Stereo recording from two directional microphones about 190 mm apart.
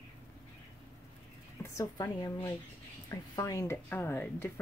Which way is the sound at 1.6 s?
15° left (ahead or behind).